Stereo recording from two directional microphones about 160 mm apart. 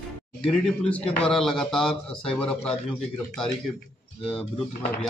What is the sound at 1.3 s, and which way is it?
Speech, centre (ahead or behind).